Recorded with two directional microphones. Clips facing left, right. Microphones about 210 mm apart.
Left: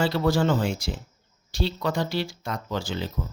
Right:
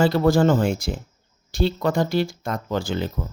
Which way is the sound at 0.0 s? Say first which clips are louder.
Right 5 dB; 50° right (ahead or behind).